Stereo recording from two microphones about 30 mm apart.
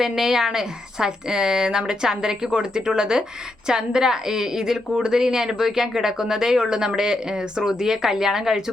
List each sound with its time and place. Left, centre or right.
0.0 s a woman's voice: centre